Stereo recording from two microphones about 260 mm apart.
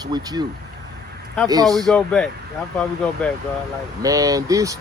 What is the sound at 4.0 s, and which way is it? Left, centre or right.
Speech, centre.